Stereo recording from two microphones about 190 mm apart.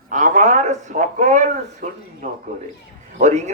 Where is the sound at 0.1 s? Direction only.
40° right (ahead or behind).